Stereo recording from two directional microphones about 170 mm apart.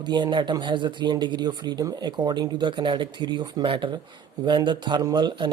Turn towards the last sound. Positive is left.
turn(degrees=-25)  # may be behind; listen again after turning